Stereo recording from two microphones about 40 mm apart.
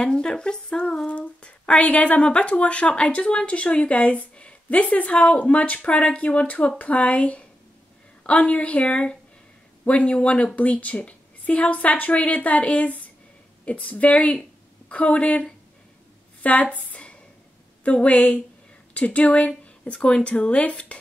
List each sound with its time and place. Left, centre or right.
0.0 s speech: centre
1.0 s a woman's voice: left
10.5 s a woman's voice: left
16.7 s a sound: left
17.8 s a woman's voice: left